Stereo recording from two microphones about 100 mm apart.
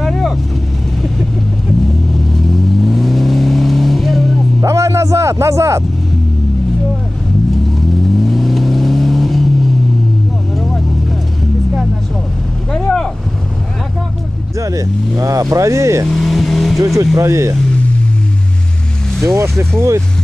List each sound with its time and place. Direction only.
0.0 s vehicle: centre (ahead or behind)
2.3 s vehicle: centre (ahead or behind)
4.6 s vehicle: 30° right (ahead or behind)
7.7 s vehicle: centre (ahead or behind)
12.7 s boat: 5° left (ahead or behind)
14.6 s vehicle: 30° right (ahead or behind)
15.5 s speech: 30° right (ahead or behind)
16.1 s speech: centre (ahead or behind)
16.8 s speech: 35° right (ahead or behind)
19.2 s speech: 30° right (ahead or behind)